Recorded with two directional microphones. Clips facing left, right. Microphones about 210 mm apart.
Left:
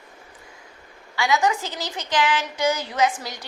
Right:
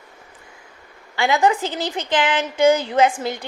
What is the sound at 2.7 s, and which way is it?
Speech, 30° right (ahead or behind).